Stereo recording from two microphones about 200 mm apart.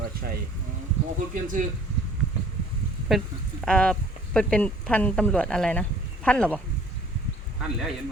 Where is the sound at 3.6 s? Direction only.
5° left (ahead or behind).